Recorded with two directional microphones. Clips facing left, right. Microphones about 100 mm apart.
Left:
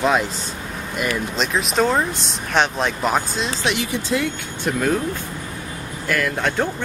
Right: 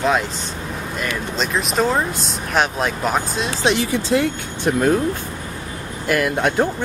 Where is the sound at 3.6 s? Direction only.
35° right (ahead or behind).